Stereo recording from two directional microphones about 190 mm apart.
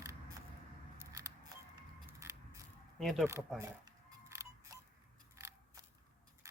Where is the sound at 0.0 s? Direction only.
15° right (ahead or behind).